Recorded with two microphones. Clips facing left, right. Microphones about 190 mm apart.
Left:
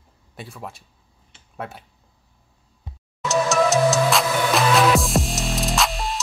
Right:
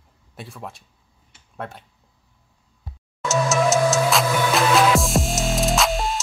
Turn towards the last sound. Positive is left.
turn(degrees=0)  # may be behind; listen again after turning